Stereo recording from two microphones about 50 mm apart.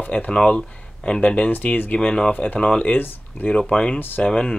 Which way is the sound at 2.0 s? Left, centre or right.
Centre.